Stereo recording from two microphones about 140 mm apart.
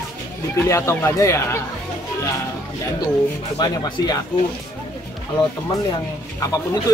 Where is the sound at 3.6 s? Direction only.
30° left (ahead or behind).